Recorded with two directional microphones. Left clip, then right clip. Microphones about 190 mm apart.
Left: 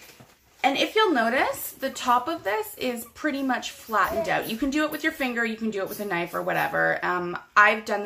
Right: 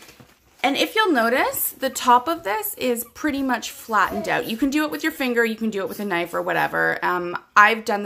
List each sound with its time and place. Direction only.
0.6 s speech: 55° right (ahead or behind)